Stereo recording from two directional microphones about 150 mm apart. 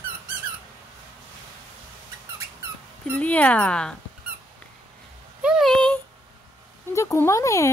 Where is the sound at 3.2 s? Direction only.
10° left (ahead or behind).